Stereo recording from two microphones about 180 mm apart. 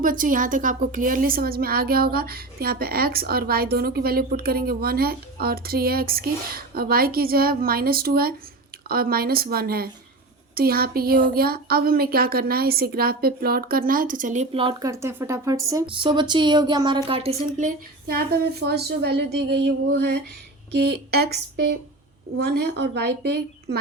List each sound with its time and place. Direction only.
0.0 s a woman's voice: 50° right (ahead or behind); by 15.6 s 15° right (ahead or behind)
15.7 s speech: 25° right (ahead or behind)
18.6 s a woman's voice: 65° right (ahead or behind)